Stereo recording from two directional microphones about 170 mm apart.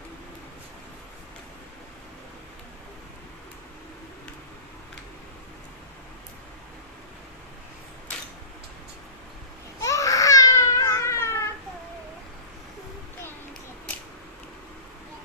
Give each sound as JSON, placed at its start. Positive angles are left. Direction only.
{"t": 9.8, "sound": "baby cry", "side_deg": 20}